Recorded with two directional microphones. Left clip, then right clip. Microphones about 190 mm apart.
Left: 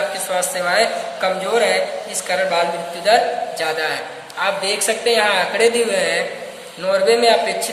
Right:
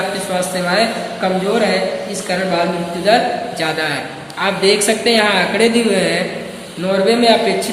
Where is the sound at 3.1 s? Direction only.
35° left (ahead or behind).